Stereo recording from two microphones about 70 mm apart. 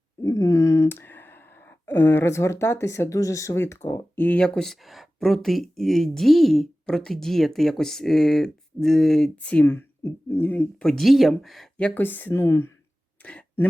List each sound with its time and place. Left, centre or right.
0.2 s a sound: left
0.9 s speech: left
4.1 s speech: left
4.4 s speech: centre
9.3 s speech: centre
9.6 s speech: left
10.8 s speech: centre
11.9 s speech: left
13.2 s a sound: centre